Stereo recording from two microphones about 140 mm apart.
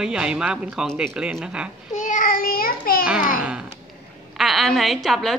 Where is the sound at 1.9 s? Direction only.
65° left (ahead or behind); by 3.0 s 90° left.